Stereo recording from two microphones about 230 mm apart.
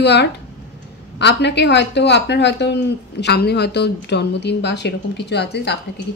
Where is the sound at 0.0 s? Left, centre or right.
Left.